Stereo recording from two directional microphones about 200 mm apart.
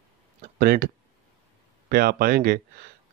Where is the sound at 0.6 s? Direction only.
50° right (ahead or behind).